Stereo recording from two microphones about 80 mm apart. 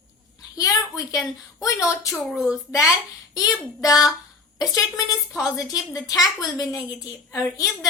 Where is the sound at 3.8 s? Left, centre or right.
Left.